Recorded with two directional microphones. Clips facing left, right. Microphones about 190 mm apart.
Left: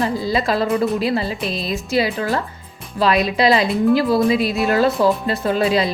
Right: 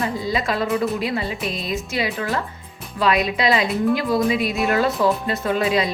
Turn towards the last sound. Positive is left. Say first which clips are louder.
# left 3 dB
turn(degrees=30)  # may be behind; listen again after turning